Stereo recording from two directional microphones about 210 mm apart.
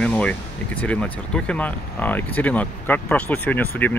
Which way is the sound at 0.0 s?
5° left (ahead or behind).